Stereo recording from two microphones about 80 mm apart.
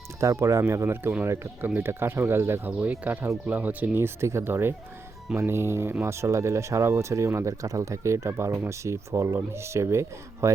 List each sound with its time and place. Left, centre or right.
0.2 s speech: right